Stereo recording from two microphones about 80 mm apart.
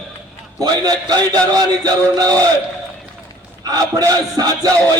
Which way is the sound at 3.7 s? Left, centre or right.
Right.